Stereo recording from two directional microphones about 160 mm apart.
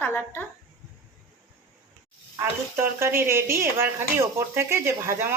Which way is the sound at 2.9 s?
15° right (ahead or behind).